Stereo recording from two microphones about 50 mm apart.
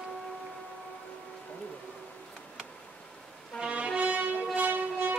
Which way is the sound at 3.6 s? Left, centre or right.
Right.